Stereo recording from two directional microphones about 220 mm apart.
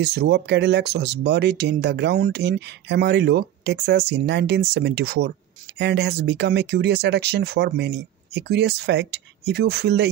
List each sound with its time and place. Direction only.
0.0 s speech: 45° right (ahead or behind)